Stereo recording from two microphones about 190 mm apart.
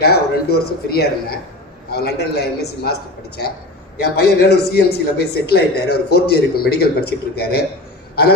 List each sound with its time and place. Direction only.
0.0 s a man's voice: 55° left (ahead or behind)
4.4 s a man's voice: 60° left (ahead or behind)